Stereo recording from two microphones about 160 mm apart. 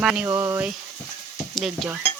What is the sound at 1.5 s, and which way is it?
Stir, centre (ahead or behind).